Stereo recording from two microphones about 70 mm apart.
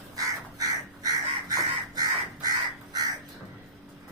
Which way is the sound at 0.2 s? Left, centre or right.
Right.